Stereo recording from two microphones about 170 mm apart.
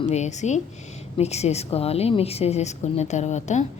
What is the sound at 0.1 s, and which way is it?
A woman's voice, 45° left (ahead or behind).